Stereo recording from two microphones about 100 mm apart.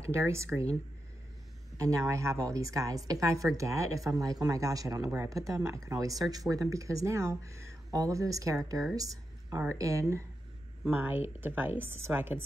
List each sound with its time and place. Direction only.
0.1 s speech: 25° right (ahead or behind)
1.8 s a woman's voice: 35° right (ahead or behind)
8.9 s a sound: 35° right (ahead or behind)
9.6 s a woman's voice: 30° right (ahead or behind)